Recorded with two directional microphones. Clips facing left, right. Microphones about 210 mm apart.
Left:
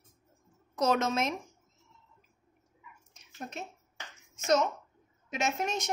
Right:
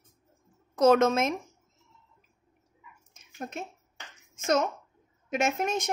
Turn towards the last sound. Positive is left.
turn(degrees=-50)  # may be behind; listen again after turning